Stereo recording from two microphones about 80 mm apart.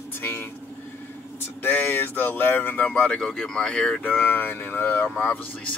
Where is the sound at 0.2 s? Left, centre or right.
Left.